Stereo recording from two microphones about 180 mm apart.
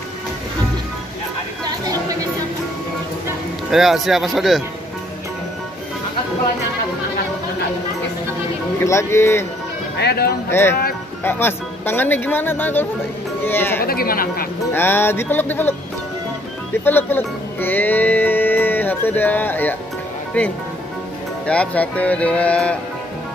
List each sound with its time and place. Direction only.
1.6 s a sound: 20° right (ahead or behind)
3.7 s speech: centre (ahead or behind)
8.8 s speech: 15° left (ahead or behind)
9.9 s speech: 65° left (ahead or behind)
10.5 s speech: 15° left (ahead or behind)
13.8 s speech: 55° left (ahead or behind)
14.7 s speech: 10° left (ahead or behind)
16.8 s speech: 10° left (ahead or behind)